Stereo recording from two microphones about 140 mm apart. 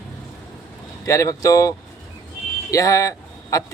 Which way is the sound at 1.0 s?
20° left (ahead or behind).